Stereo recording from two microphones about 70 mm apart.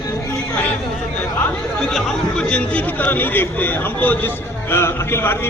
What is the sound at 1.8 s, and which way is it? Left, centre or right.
Speech, centre.